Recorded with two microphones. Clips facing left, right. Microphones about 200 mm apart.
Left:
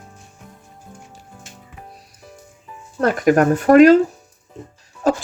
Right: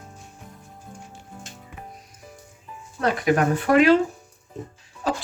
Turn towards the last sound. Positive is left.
turn(degrees=45)  # may be behind; listen again after turning